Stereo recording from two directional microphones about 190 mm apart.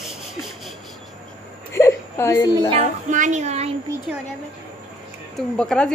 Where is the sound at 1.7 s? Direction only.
15° left (ahead or behind).